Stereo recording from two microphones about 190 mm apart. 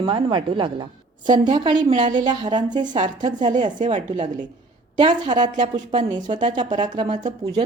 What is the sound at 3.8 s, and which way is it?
Speech, 35° right (ahead or behind).